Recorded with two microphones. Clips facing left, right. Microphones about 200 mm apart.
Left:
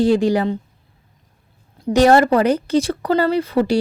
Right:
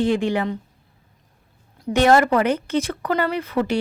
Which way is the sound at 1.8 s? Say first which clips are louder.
Left 3 dB; 35° left (ahead or behind).